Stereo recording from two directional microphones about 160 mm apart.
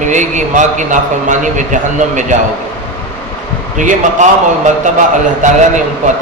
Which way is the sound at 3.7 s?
50° right (ahead or behind).